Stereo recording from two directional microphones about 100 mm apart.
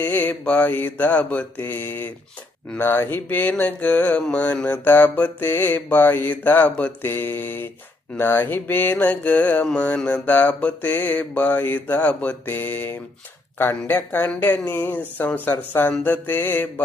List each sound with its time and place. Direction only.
0.0 s mantra: 15° left (ahead or behind)
2.6 s speech: 20° left (ahead or behind)
3.6 s mantra: 15° left (ahead or behind)
13.6 s speech: 20° left (ahead or behind)